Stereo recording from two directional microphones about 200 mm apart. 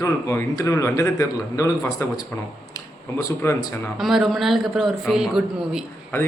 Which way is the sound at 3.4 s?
10° left (ahead or behind).